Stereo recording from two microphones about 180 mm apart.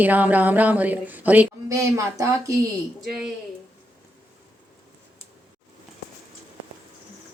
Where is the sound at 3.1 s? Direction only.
5° right (ahead or behind).